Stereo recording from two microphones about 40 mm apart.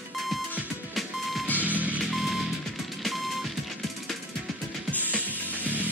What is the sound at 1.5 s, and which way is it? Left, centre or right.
Music, right.